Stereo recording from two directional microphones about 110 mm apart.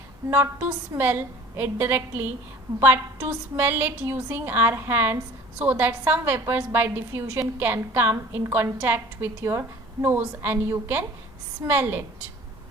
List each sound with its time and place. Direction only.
0.3 s a woman's voice: 20° right (ahead or behind)